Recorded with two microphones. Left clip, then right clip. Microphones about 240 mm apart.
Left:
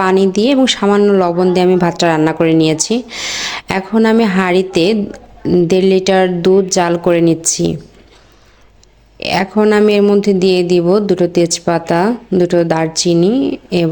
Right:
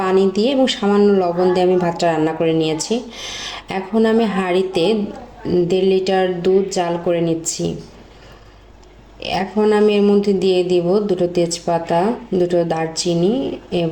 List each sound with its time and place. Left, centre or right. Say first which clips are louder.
0.0 s speech: left 4 dB; left
9.3 s speech: left 4 dB; left